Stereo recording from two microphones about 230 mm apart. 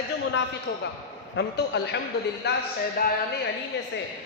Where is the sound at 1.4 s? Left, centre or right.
Left.